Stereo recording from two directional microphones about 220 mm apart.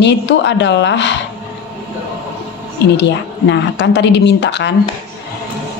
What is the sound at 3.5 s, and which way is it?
A woman's voice, 55° left (ahead or behind).